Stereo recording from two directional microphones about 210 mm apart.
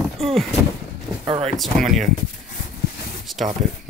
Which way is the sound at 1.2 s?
25° right (ahead or behind).